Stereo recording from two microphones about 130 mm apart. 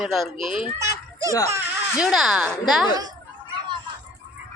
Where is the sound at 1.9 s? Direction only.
5° right (ahead or behind).